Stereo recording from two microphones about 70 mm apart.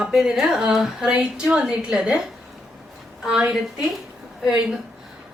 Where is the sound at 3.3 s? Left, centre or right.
Centre.